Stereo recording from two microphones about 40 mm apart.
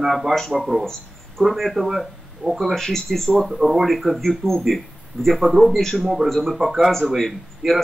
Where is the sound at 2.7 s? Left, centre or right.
Centre.